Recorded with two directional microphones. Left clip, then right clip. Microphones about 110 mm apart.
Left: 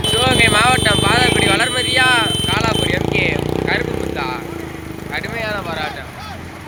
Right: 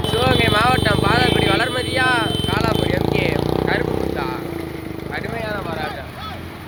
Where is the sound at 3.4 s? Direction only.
40° left (ahead or behind).